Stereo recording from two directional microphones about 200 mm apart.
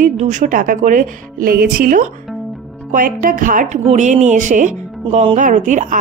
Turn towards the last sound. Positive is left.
turn(degrees=-40)  # may be behind; listen again after turning